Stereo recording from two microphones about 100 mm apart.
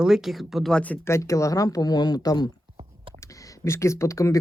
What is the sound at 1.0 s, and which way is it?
Speech, 30° left (ahead or behind).